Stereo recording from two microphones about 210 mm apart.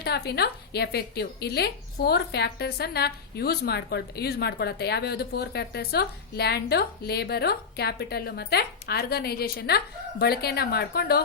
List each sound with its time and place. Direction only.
0.0 s speech: 50° left (ahead or behind)